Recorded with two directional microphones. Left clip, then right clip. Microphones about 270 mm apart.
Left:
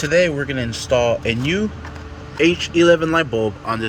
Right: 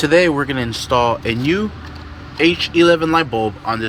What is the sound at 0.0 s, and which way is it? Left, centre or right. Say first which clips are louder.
Speech: right 3 dB; centre.